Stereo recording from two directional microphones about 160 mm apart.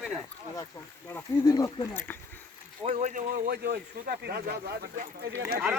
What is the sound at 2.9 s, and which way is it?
Speech, 40° right (ahead or behind).